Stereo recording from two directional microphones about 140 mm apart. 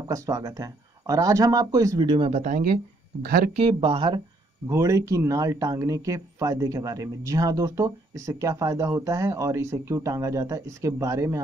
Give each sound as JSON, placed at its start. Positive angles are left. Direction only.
{"t": 0.1, "sound": "speech", "side_deg": -25}
{"t": 2.4, "sound": "speech", "side_deg": -80}
{"t": 3.5, "sound": "speech", "side_deg": -40}
{"t": 4.6, "sound": "speech", "side_deg": -20}